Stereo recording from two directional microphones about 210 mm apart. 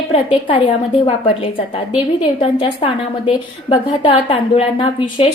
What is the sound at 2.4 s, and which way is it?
A woman's voice, 25° left (ahead or behind).